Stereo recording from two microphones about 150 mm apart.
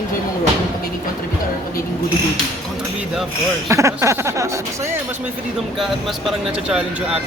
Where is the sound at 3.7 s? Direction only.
20° right (ahead or behind).